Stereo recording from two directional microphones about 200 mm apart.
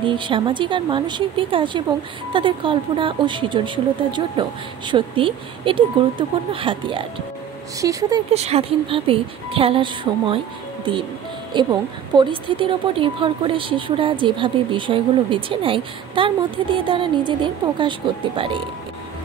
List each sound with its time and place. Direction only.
0.0 s a woman's voice: 25° right (ahead or behind)
8.3 s a woman's voice: 30° right (ahead or behind)
11.5 s a woman's voice: 25° right (ahead or behind)